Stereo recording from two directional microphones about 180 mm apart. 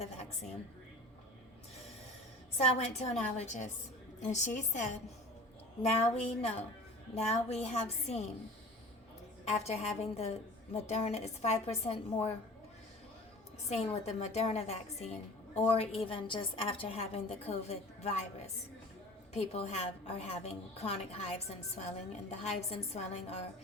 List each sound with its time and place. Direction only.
2.6 s a woman's voice: 35° left (ahead or behind)
5.9 s a woman's voice: 35° left (ahead or behind)
9.4 s a woman's voice: 35° left (ahead or behind)
13.7 s a woman's voice: 35° left (ahead or behind)